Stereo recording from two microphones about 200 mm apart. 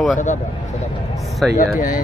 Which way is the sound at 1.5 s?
40° left (ahead or behind).